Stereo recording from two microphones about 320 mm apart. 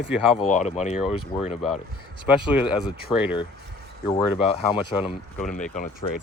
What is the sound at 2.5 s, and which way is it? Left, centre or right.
Speech, centre.